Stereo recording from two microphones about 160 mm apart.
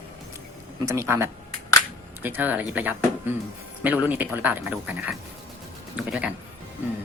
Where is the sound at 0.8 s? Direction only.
15° right (ahead or behind).